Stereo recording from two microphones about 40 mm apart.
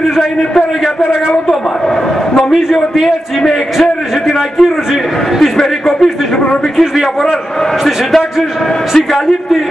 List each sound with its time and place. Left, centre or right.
3.7 s a man's voice: centre
6.8 s a man's voice: centre